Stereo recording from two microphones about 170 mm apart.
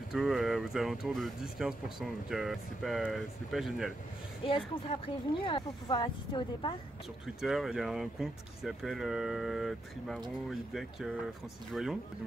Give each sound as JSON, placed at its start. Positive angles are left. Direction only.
{"t": 0.1, "sound": "speech", "side_deg": 0}
{"t": 4.5, "sound": "speech", "side_deg": 30}
{"t": 7.4, "sound": "speech", "side_deg": 0}